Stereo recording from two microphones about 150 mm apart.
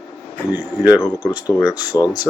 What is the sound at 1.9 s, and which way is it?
Speech, 25° left (ahead or behind).